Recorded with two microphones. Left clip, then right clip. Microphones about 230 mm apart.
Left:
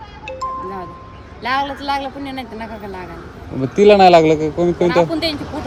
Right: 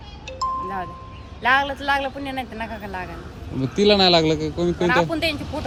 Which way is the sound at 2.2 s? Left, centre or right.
Right.